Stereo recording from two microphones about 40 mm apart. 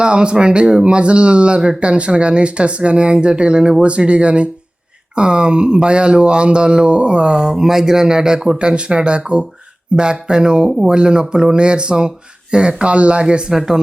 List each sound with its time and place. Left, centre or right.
0.0 s speech: right
13.5 s speech: centre